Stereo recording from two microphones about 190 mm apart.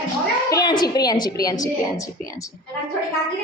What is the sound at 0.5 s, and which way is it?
A woman's voice, 20° left (ahead or behind).